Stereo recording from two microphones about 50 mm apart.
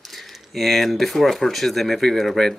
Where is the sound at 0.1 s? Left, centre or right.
Centre.